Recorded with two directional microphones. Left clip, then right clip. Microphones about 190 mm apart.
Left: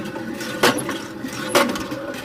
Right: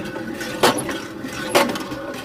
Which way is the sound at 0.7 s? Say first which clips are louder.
Even; 10° right (ahead or behind).